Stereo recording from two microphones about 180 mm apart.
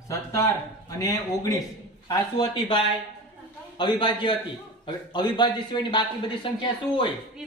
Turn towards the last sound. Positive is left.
turn(degrees=25)  # may be behind; listen again after turning